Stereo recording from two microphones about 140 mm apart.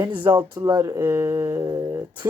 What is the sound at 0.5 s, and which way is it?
Speech, 25° right (ahead or behind).